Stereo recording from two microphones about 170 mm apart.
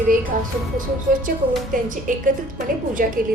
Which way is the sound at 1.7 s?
50° right (ahead or behind).